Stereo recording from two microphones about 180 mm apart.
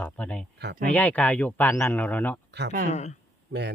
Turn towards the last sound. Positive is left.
turn(degrees=-70)  # may be behind; listen again after turning